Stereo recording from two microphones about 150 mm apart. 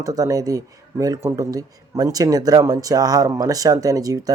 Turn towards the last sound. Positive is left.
turn(degrees=-25)  # may be behind; listen again after turning